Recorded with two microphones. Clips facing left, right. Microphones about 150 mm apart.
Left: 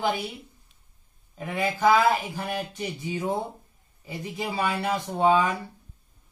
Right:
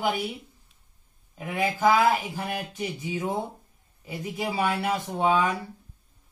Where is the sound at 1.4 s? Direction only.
10° right (ahead or behind).